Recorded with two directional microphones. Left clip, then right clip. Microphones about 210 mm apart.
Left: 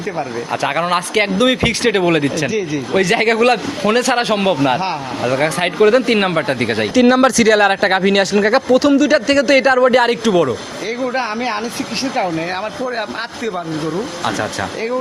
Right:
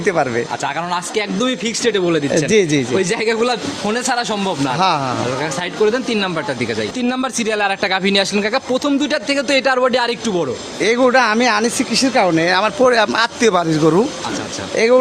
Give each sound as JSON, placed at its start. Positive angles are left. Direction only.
{"t": 0.6, "sound": "a man's voice", "side_deg": 20}
{"t": 2.5, "sound": "speech", "side_deg": -55}
{"t": 3.0, "sound": "a man's voice", "side_deg": 20}
{"t": 10.8, "sound": "speech", "side_deg": -50}